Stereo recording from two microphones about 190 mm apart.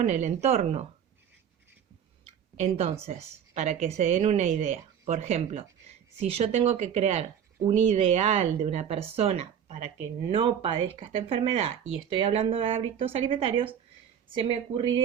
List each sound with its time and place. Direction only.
0.0 s a woman's voice: 35° right (ahead or behind)
2.6 s a woman's voice: 35° right (ahead or behind)